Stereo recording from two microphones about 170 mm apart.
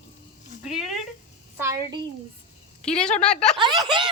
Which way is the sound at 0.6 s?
5° right (ahead or behind).